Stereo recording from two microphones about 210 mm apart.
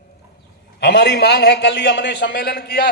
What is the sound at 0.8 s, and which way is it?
A man's voice, 55° left (ahead or behind).